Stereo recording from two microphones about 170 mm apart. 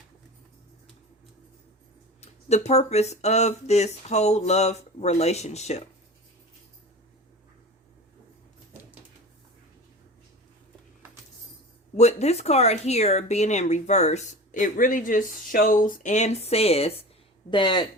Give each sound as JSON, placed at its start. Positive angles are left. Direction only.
{"t": 2.2, "sound": "speech", "side_deg": 40}
{"t": 11.9, "sound": "speech", "side_deg": 40}